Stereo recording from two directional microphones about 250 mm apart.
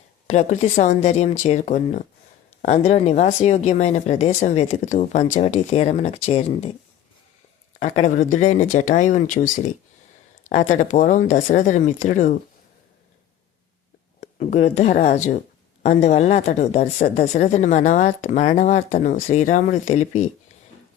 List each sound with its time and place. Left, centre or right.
0.3 s speech: left
7.8 s speech: left
14.2 s speech: left